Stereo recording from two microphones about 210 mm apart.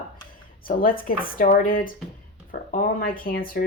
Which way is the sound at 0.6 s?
40° left (ahead or behind).